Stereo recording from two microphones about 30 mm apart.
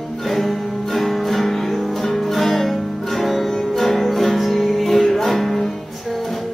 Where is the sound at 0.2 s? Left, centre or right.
Centre.